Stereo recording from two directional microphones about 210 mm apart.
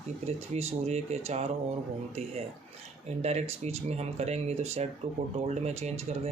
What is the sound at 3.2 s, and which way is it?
Speech, 30° right (ahead or behind).